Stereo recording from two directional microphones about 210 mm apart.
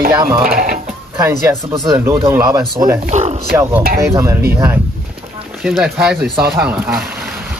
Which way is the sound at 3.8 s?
45° right (ahead or behind).